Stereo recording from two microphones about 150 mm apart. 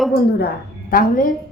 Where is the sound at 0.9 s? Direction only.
65° left (ahead or behind).